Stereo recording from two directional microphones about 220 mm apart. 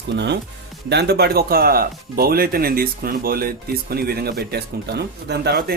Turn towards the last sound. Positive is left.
turn(degrees=-45)  # may be behind; listen again after turning